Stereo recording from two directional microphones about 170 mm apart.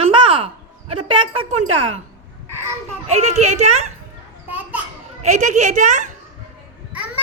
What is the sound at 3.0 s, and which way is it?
Speech, 40° right (ahead or behind).